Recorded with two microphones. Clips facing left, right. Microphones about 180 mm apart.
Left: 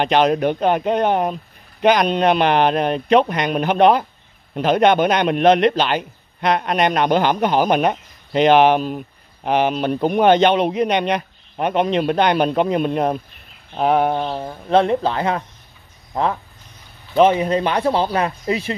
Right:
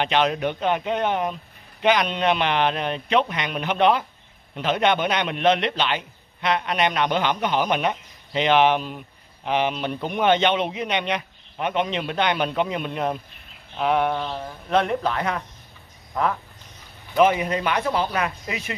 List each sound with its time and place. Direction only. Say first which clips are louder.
0.0 s a man's voice: left 6 dB; 45° left (ahead or behind)
14.4 s speech: left 6 dB; 30° left (ahead or behind)